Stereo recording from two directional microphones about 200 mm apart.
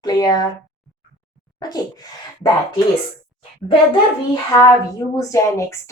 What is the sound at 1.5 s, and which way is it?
Speech, 20° left (ahead or behind).